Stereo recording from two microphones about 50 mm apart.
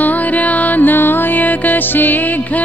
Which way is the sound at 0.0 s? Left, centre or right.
Left.